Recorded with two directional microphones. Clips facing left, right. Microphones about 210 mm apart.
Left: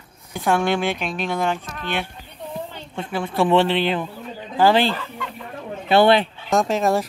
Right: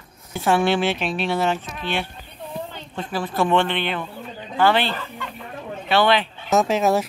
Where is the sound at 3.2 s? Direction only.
25° left (ahead or behind).